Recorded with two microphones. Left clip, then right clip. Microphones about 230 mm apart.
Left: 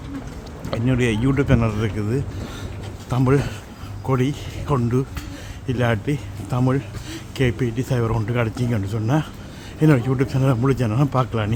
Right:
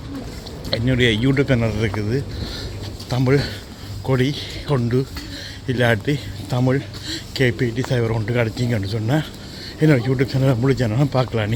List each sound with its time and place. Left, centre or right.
0.7 s speech: centre